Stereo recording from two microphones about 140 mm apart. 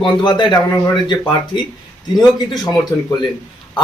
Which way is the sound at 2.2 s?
30° left (ahead or behind).